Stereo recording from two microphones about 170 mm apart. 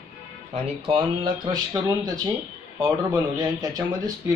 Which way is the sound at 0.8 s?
30° right (ahead or behind).